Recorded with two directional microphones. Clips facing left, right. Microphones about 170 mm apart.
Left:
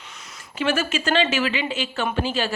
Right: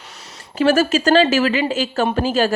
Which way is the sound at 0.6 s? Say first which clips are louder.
Right 8 dB; 40° right (ahead or behind).